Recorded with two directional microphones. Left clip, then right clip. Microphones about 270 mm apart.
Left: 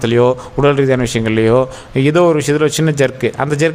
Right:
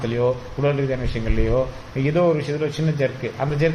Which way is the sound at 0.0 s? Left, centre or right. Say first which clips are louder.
Left 9 dB; left.